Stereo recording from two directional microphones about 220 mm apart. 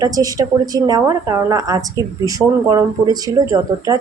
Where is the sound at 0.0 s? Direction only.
15° right (ahead or behind).